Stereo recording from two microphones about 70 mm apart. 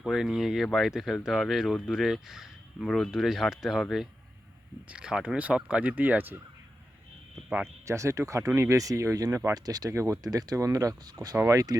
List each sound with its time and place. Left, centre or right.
0.0 s speech: centre
2.8 s speech: centre
4.9 s speech: centre
7.9 s speech: right
9.6 s speech: right
9.9 s speech: right
10.2 s speech: right
11.3 s speech: right